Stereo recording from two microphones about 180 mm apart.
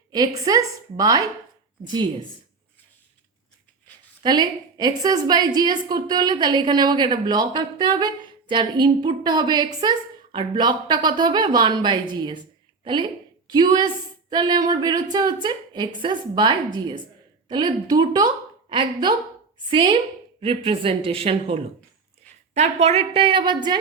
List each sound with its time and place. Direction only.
0.1 s a woman's voice: 20° right (ahead or behind)
4.2 s a woman's voice: 25° right (ahead or behind)